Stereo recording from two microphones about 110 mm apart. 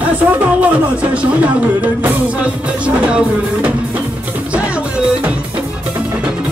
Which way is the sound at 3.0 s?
10° right (ahead or behind).